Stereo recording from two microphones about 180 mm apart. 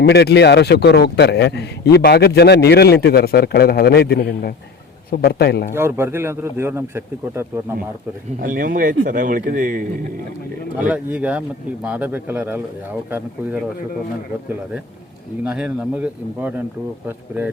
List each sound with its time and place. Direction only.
0.0 s a man's voice: 65° left (ahead or behind)
5.7 s speech: 15° right (ahead or behind)
8.4 s speech: 50° right (ahead or behind)
10.8 s speech: 5° right (ahead or behind)
15.4 s speech: 5° right (ahead or behind)